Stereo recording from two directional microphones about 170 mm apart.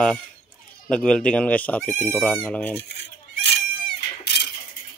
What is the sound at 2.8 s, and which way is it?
Goat, 85° left.